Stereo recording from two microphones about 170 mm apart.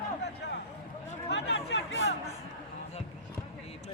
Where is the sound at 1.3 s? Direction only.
90° left.